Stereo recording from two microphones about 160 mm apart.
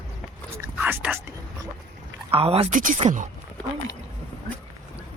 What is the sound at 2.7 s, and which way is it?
Speech, 55° right (ahead or behind).